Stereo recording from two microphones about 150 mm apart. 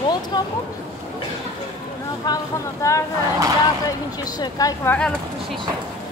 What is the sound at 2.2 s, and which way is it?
Speech, 30° left (ahead or behind).